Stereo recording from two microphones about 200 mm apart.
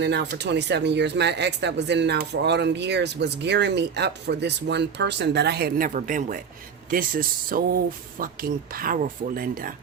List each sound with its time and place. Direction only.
0.0 s speech: 60° right (ahead or behind)